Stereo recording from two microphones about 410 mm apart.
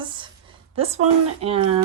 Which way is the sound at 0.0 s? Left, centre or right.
Centre.